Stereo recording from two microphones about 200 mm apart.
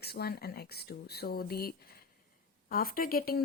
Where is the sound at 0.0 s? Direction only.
50° left (ahead or behind).